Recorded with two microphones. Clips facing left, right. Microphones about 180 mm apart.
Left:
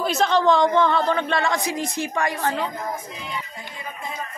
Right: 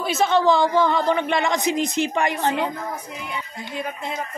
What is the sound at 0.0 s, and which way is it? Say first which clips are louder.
Speech: even; 5° right (ahead or behind).